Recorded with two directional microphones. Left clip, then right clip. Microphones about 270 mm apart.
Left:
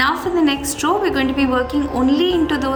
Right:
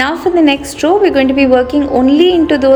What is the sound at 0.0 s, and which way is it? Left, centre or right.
A woman's voice, centre.